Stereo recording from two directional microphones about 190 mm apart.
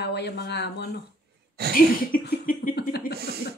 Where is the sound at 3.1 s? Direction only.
55° right (ahead or behind).